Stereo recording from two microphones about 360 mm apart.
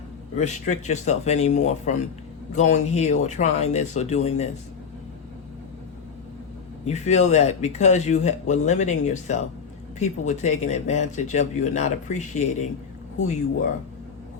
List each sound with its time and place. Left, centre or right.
0.3 s speech: centre
6.8 s speech: centre